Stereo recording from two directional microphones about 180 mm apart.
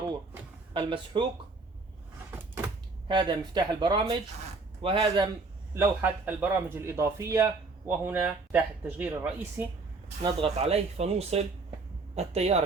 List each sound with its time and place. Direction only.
0.7 s speech: 30° right (ahead or behind)
3.1 s speech: 25° right (ahead or behind)
5.7 s a man's voice: 10° right (ahead or behind)
10.2 s speech: 35° right (ahead or behind)